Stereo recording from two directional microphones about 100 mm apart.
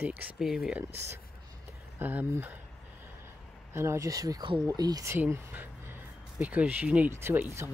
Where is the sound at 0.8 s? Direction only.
25° right (ahead or behind).